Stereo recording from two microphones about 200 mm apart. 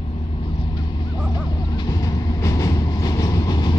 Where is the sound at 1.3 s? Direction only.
20° left (ahead or behind).